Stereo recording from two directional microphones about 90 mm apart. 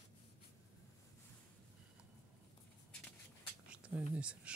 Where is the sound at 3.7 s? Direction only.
10° right (ahead or behind).